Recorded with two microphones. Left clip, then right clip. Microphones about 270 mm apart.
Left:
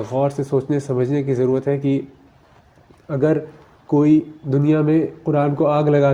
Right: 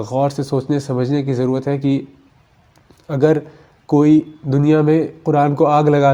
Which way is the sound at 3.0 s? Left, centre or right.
Right.